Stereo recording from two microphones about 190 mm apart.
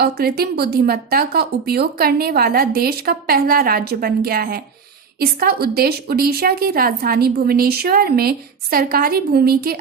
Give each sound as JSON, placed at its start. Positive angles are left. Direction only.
{"t": 0.0, "sound": "a woman's voice", "side_deg": -55}